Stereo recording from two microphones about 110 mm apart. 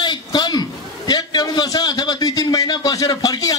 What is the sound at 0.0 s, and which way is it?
A man's voice, 40° left (ahead or behind).